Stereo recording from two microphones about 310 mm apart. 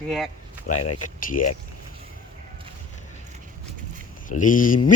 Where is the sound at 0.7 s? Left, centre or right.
Left.